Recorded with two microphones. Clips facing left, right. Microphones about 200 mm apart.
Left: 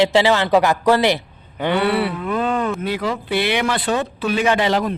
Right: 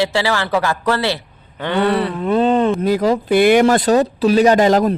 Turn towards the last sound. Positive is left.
turn(degrees=-45)  # may be behind; listen again after turning